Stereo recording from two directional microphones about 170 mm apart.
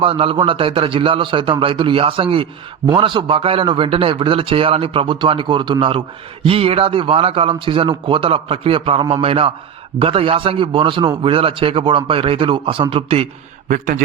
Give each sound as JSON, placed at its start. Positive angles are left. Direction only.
{"t": 0.0, "sound": "a man's voice", "side_deg": -30}
{"t": 13.7, "sound": "a man's voice", "side_deg": -55}